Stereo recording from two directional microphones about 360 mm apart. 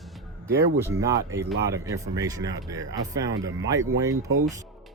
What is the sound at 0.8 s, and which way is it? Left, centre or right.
Speech, centre.